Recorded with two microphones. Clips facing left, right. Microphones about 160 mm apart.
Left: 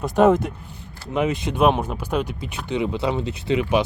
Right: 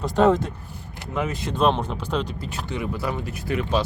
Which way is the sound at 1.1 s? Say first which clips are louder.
Left 4 dB; 20° left (ahead or behind).